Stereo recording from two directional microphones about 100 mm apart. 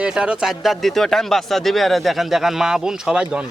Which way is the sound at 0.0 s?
10° right (ahead or behind).